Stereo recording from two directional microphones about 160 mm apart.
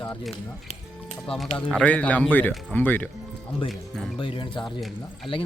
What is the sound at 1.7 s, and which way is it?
A man's voice, 10° left (ahead or behind).